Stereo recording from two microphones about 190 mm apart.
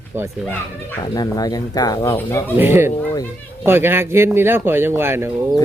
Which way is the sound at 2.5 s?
10° right (ahead or behind).